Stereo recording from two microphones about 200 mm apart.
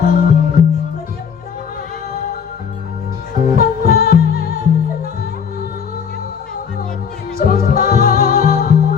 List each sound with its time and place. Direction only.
0.0 s music: 45° left (ahead or behind)
3.3 s music: 45° left (ahead or behind)
7.3 s music: 45° left (ahead or behind)